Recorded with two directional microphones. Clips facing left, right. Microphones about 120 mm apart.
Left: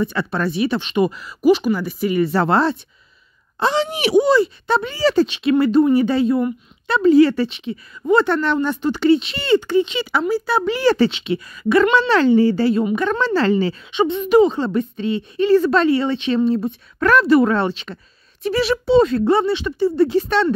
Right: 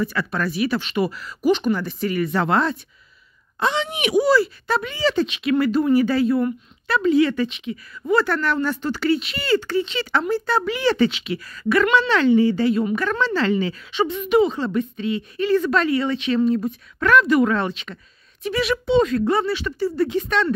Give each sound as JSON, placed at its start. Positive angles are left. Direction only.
{"t": 0.0, "sound": "speech", "side_deg": 25}
{"t": 2.1, "sound": "speech", "side_deg": 35}
{"t": 7.0, "sound": "speech", "side_deg": 35}
{"t": 10.8, "sound": "speech", "side_deg": 40}
{"t": 11.1, "sound": "speech", "side_deg": 25}
{"t": 12.8, "sound": "speech", "side_deg": 20}
{"t": 13.2, "sound": "speech", "side_deg": 40}
{"t": 20.1, "sound": "speech", "side_deg": 35}